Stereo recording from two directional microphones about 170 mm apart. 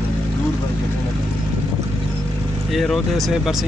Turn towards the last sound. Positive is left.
turn(degrees=0)  # may be behind; listen again after turning